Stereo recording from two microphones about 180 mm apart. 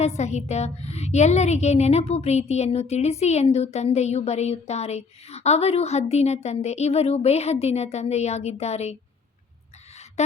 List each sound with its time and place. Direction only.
0.0 s a woman's voice: 40° left (ahead or behind)
10.2 s a woman's voice: 40° left (ahead or behind)